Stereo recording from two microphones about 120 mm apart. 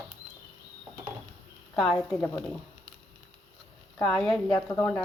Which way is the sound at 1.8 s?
Centre (ahead or behind).